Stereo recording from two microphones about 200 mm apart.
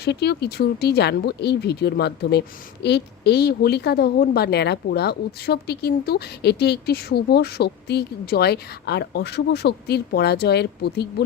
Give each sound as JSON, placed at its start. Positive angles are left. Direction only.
{"t": 0.0, "sound": "a woman's voice", "side_deg": 55}